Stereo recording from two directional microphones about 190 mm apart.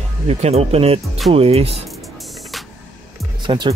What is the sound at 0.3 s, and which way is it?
Speech, 35° right (ahead or behind).